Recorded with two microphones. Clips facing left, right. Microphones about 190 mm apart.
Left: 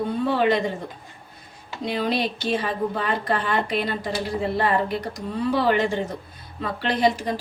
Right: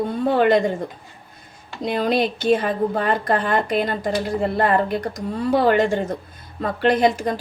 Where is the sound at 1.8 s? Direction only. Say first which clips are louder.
Right 4 dB; 50° right (ahead or behind).